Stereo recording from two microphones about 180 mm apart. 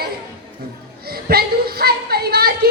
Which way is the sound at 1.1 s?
60° right (ahead or behind).